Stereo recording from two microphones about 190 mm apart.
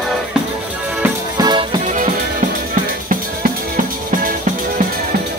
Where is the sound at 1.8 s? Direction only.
40° right (ahead or behind).